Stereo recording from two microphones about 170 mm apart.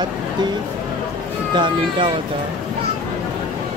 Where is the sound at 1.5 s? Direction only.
30° right (ahead or behind).